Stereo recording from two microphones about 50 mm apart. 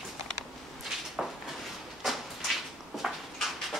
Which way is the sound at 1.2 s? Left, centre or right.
Centre.